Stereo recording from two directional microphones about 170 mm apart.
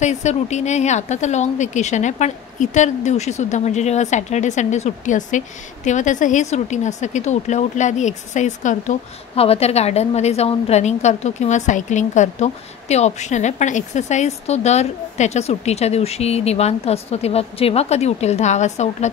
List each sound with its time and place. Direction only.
0.0 s speech: 45° left (ahead or behind)